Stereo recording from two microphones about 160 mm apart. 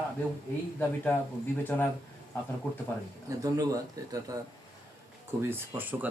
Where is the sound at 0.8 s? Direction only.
10° left (ahead or behind).